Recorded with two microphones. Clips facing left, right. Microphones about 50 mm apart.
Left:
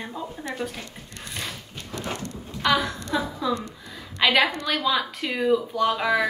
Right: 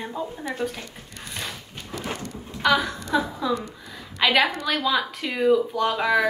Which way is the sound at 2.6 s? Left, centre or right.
Centre.